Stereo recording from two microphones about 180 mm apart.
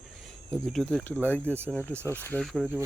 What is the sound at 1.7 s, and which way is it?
Speech, 15° right (ahead or behind).